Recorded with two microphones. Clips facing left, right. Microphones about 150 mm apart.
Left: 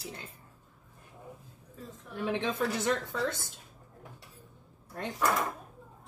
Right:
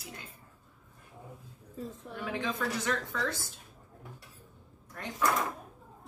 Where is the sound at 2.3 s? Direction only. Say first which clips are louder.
Left 2 dB; 25° left (ahead or behind).